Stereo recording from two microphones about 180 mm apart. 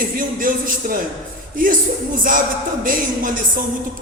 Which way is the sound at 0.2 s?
50° right (ahead or behind).